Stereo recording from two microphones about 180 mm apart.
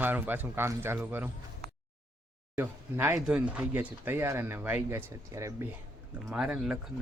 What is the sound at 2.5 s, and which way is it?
Speech, 15° right (ahead or behind).